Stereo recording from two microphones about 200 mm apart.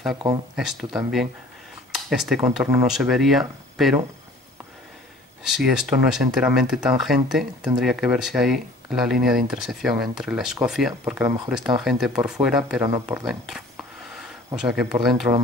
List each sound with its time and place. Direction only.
0.6 s speech: centre (ahead or behind)
5.4 s speech: centre (ahead or behind)
12.8 s speech: 15° right (ahead or behind)
14.1 s speech: 5° right (ahead or behind)